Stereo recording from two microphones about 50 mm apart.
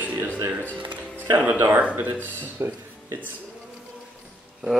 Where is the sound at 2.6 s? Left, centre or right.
Right.